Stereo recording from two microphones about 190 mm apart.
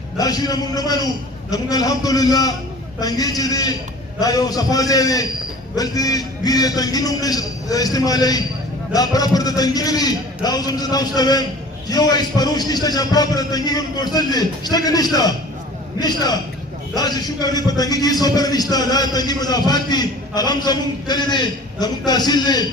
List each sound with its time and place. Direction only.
0.2 s a man's voice: 20° left (ahead or behind)